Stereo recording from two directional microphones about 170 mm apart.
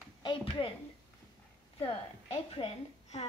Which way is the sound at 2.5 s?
35° left (ahead or behind).